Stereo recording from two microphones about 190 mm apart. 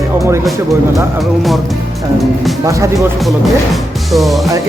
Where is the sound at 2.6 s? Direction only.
15° right (ahead or behind).